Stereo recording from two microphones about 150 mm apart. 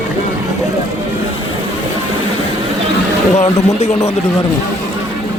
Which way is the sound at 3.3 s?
45° left (ahead or behind).